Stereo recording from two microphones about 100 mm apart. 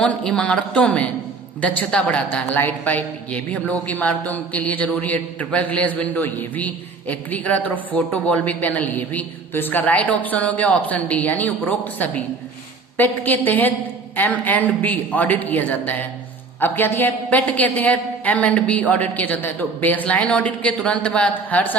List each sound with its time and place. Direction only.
0.0 s a man's voice: 10° left (ahead or behind)